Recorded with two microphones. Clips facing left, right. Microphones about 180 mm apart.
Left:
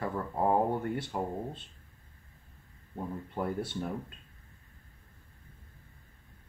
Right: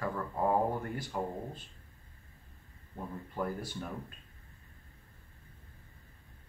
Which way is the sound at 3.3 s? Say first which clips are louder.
Left 2 dB; 25° left (ahead or behind).